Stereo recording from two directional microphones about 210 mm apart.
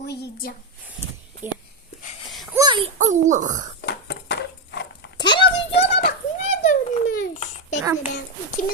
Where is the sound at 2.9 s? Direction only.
35° right (ahead or behind).